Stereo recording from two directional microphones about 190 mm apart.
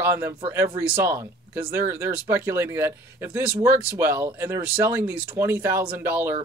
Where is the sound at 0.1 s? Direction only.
15° right (ahead or behind).